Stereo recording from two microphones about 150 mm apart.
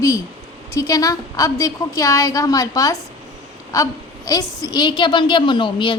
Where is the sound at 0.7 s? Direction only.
20° left (ahead or behind).